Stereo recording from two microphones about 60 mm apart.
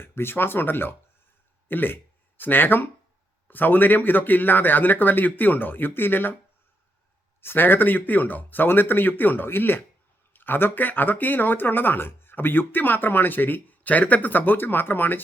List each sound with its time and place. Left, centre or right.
0.0 s speech: left
7.4 s speech: left